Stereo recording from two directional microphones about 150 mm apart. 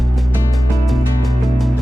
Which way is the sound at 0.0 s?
Centre (ahead or behind).